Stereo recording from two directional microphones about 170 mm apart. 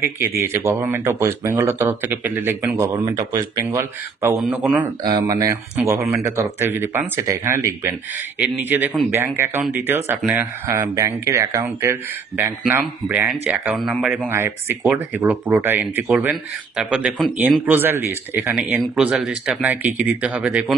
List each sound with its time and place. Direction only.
0.0 s speech: 10° right (ahead or behind)
4.4 s speech: centre (ahead or behind)
5.0 s speech: 25° right (ahead or behind); by 14.3 s centre (ahead or behind)
14.3 s speech: 15° right (ahead or behind)
18.5 s speech: 5° right (ahead or behind)